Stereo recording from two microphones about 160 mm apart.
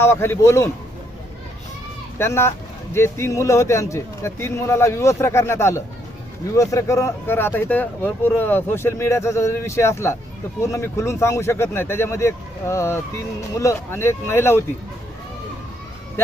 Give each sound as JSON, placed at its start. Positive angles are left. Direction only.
{"t": 0.0, "sound": "speech", "side_deg": 15}
{"t": 2.1, "sound": "speech", "side_deg": 15}